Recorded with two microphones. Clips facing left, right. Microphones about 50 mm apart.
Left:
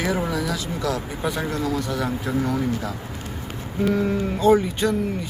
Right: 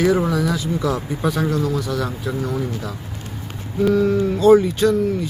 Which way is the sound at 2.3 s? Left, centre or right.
Left.